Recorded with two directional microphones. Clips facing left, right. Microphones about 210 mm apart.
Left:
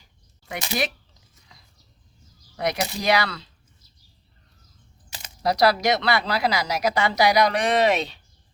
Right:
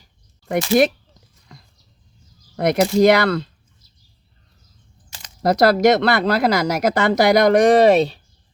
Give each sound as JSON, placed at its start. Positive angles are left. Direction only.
{"t": 0.0, "sound": "a sound", "side_deg": -50}
{"t": 2.6, "sound": "speech", "side_deg": -50}
{"t": 5.4, "sound": "speech", "side_deg": -50}